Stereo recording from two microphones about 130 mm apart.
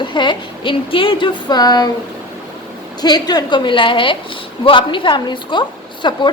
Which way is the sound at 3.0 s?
30° left (ahead or behind).